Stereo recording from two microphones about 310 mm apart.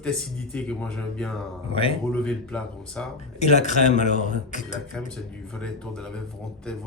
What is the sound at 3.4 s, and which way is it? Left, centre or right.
Speech, left.